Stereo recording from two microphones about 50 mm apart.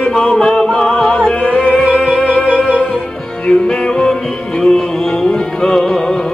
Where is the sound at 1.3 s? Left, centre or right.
Left.